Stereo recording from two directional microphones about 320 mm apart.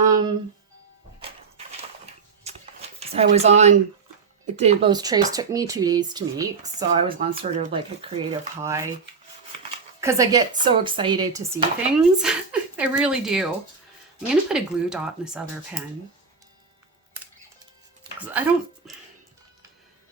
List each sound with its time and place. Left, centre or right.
1.2 s a sound: centre
3.0 s speech: centre
10.0 s speech: centre
18.3 s speech: centre